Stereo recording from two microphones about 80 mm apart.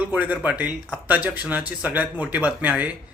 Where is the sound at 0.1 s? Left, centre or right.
Centre.